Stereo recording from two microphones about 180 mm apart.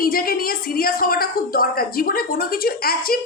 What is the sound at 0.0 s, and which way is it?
A woman's voice, 55° left (ahead or behind).